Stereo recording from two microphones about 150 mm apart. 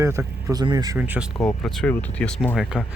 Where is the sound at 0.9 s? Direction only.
10° right (ahead or behind).